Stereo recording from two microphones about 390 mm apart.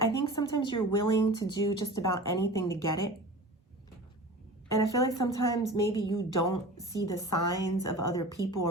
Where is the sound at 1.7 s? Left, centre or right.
Left.